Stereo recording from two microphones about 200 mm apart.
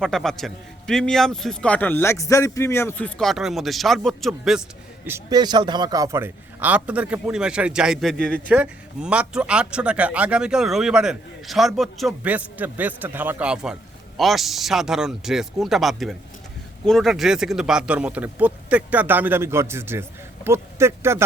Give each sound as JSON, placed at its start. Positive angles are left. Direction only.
{"t": 0.0, "sound": "speech", "side_deg": 0}
{"t": 5.0, "sound": "speech", "side_deg": -15}